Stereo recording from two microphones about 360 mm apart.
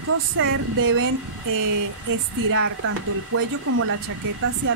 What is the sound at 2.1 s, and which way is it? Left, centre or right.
Speech, right.